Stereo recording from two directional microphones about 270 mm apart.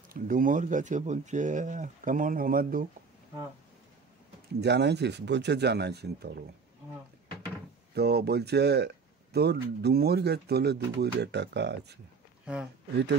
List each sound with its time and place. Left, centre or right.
0.1 s speech: right
4.6 s speech: right
7.9 s speech: right